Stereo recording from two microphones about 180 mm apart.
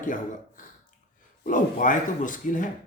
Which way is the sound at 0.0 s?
45° left (ahead or behind).